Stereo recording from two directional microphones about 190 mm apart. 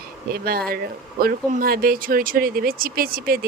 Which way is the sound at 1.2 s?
50° right (ahead or behind).